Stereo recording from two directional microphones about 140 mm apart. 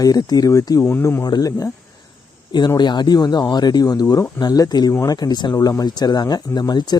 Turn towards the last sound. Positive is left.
turn(degrees=30)  # may be behind; listen again after turning